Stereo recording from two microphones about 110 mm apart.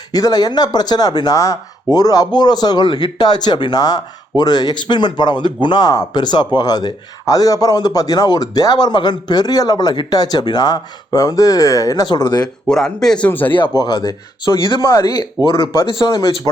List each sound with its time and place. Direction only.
0.1 s speech: 35° left (ahead or behind)
12.6 s speech: 5° left (ahead or behind)
13.7 s speech: 35° left (ahead or behind)
14.8 s speech: 30° left (ahead or behind)